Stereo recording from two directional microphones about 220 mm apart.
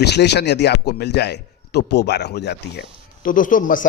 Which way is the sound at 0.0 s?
50° left (ahead or behind).